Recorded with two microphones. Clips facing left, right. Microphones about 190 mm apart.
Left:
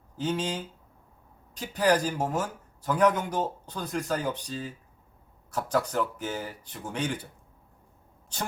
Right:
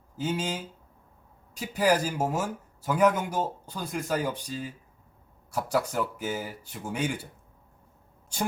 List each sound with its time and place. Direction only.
0.2 s speech: 10° right (ahead or behind)